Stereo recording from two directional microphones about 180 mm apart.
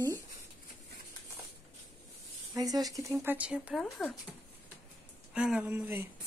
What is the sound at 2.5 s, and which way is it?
Speech, 20° right (ahead or behind).